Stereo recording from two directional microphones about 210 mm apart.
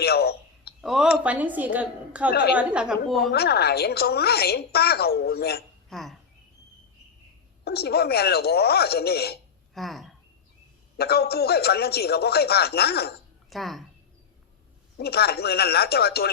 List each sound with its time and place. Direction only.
0.0 s a sound: 50° left (ahead or behind)
0.8 s a woman's voice: centre (ahead or behind)
2.3 s a woman's voice: 55° left (ahead or behind)
2.6 s a woman's voice: 5° right (ahead or behind)
3.3 s a woman's voice: 50° left (ahead or behind)
5.9 s a woman's voice: centre (ahead or behind)
7.6 s a woman's voice: 50° left (ahead or behind)
9.7 s speech: centre (ahead or behind)
10.9 s a woman's voice: 50° left (ahead or behind)
13.5 s a woman's voice: centre (ahead or behind)
14.9 s a woman's voice: 50° left (ahead or behind)